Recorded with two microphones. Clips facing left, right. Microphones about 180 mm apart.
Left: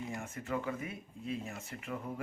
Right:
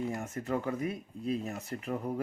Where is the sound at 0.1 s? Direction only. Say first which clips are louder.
Right 5 dB; 40° right (ahead or behind).